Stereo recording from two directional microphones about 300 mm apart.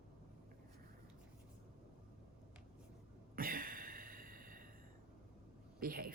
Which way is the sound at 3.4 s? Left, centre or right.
Right.